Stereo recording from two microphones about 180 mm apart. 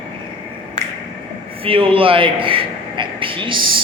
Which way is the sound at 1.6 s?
30° right (ahead or behind).